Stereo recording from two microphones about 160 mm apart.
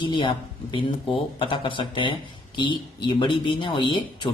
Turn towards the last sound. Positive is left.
turn(degrees=30)  # may be behind; listen again after turning